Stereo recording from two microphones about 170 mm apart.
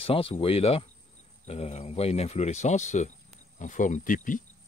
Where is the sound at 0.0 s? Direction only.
30° left (ahead or behind).